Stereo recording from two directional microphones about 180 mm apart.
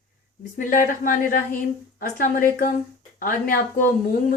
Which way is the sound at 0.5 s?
50° left (ahead or behind).